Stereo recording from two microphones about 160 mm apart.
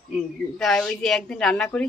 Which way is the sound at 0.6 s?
5° left (ahead or behind).